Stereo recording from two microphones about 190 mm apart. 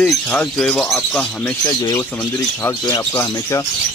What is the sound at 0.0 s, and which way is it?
Speech, 5° left (ahead or behind).